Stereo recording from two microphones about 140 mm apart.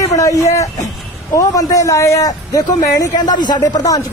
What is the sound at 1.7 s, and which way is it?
Speech, 20° left (ahead or behind).